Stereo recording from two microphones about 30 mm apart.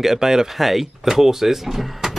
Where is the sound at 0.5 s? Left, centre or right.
Centre.